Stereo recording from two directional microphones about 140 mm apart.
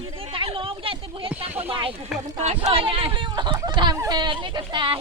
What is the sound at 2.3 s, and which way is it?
Speech, 55° right (ahead or behind).